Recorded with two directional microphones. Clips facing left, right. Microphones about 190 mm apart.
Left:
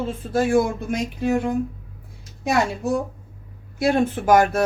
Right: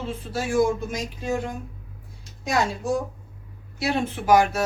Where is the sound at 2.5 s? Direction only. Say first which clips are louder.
Left 3 dB; 60° left (ahead or behind).